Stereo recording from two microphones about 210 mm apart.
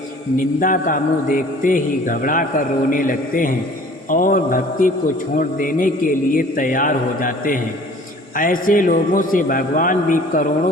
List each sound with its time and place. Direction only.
0.3 s a man's voice: 40° left (ahead or behind)